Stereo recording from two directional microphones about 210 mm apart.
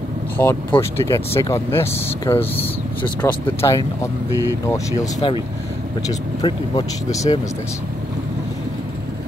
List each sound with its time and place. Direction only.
0.4 s speech: 10° left (ahead or behind)
6.4 s speech: 20° left (ahead or behind)